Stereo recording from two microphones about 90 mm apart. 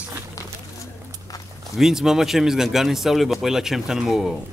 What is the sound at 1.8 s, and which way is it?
Speech, 5° right (ahead or behind).